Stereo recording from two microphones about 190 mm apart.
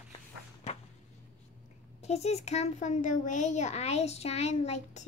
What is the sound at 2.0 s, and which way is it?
A child's voice, 35° left (ahead or behind).